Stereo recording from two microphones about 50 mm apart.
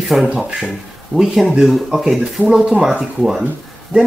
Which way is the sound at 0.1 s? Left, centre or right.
Centre.